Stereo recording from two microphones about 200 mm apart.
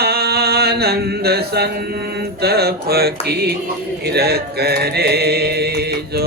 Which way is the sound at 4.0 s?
55° right (ahead or behind).